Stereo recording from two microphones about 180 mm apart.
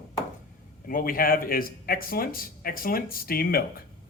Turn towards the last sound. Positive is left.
turn(degrees=55)  # may be behind; listen again after turning